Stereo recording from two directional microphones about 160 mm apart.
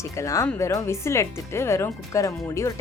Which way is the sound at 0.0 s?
20° left (ahead or behind).